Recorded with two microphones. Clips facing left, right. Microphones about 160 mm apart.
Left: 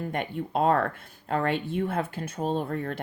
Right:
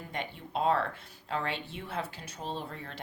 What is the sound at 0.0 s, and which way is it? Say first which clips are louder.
Speech: left 8 dB; 55° left (ahead or behind).